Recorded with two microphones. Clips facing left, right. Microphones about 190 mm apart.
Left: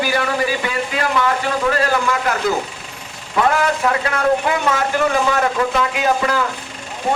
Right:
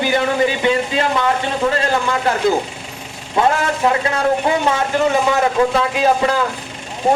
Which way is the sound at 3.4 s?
25° right (ahead or behind).